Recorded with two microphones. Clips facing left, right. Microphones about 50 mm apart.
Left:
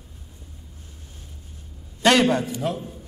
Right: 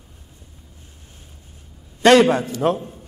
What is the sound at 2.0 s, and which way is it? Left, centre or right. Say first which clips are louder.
Speech: right 5 dB; right.